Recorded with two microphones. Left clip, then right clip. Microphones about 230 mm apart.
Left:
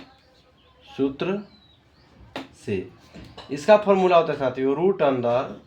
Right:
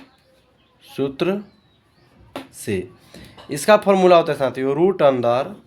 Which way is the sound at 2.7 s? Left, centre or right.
Right.